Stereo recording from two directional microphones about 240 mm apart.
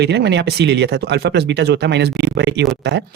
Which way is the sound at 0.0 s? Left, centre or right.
Right.